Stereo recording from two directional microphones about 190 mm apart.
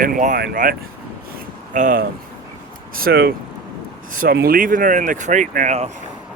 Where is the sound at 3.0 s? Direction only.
55° right (ahead or behind).